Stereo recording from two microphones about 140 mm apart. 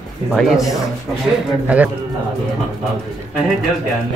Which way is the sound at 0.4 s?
Centre (ahead or behind).